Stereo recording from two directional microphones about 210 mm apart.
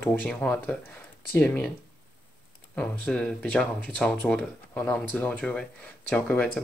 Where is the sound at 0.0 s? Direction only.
10° left (ahead or behind).